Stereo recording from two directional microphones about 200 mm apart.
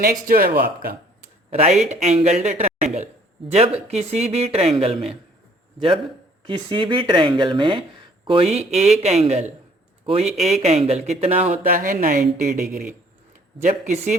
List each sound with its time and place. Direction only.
0.0 s speech: 45° right (ahead or behind)
1.5 s a man's voice: 30° right (ahead or behind)
6.5 s a man's voice: 25° right (ahead or behind)
11.6 s a man's voice: 45° right (ahead or behind)